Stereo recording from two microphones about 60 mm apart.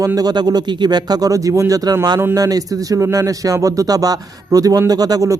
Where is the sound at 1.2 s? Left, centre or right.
Right.